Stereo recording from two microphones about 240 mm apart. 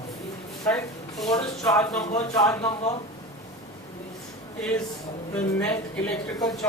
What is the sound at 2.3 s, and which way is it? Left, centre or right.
Speech, centre.